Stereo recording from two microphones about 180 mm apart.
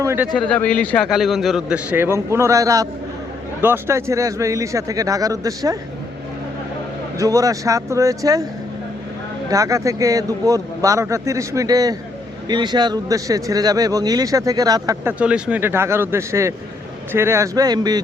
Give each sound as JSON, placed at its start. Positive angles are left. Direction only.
{"t": 0.0, "sound": "speech", "side_deg": -15}
{"t": 0.3, "sound": "a man's voice", "side_deg": 5}
{"t": 7.2, "sound": "speech", "side_deg": -20}
{"t": 9.5, "sound": "speech", "side_deg": -20}
{"t": 15.2, "sound": "speech", "side_deg": -5}